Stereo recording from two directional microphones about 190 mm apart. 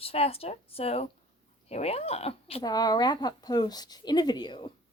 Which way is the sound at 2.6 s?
20° left (ahead or behind).